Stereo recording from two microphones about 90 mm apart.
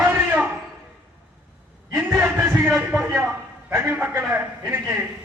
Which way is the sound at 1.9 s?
25° right (ahead or behind).